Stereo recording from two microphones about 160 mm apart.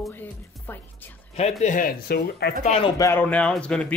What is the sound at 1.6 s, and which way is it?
Speech, 55° left (ahead or behind).